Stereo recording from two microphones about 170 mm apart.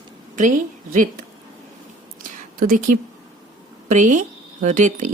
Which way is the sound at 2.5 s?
55° right (ahead or behind).